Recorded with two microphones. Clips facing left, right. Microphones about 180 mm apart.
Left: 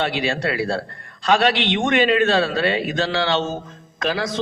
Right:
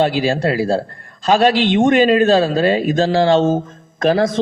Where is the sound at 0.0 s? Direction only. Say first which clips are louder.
Right 6 dB; 35° right (ahead or behind).